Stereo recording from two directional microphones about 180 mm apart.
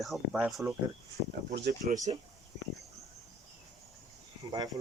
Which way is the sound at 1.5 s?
60° right (ahead or behind).